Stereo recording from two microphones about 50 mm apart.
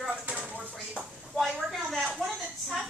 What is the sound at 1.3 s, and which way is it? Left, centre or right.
Speech, centre.